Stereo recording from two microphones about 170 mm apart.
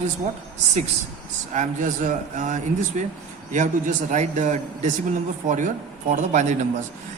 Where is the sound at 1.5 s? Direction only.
50° right (ahead or behind).